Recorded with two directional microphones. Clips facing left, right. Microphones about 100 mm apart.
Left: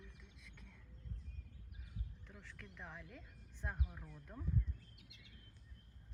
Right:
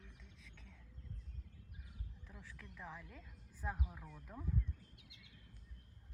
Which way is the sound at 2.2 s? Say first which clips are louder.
Even; 5° right (ahead or behind).